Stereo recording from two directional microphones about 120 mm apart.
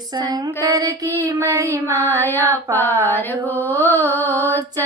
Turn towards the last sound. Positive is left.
turn(degrees=20)  # may be behind; listen again after turning